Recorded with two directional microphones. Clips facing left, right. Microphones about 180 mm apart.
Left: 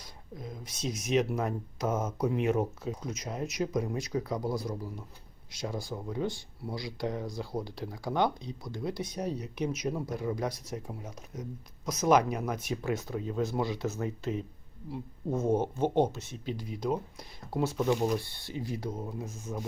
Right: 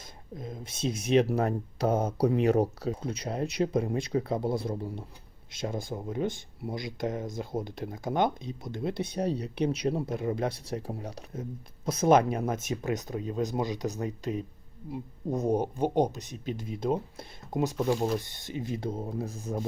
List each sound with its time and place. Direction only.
0.3 s speech: 25° right (ahead or behind)
17.6 s speech: 15° right (ahead or behind); by 19.5 s 35° right (ahead or behind)